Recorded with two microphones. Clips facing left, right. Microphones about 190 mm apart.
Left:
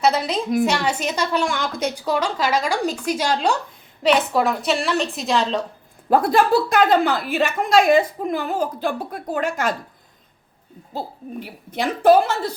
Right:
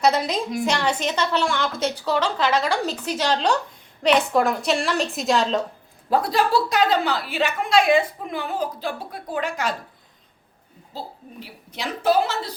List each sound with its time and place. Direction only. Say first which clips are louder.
0.0 s a woman's voice: left 1 dB; centre (ahead or behind)
6.1 s a woman's voice: left 4 dB; 50° left (ahead or behind)
10.9 s a woman's voice: left 6 dB; 50° left (ahead or behind)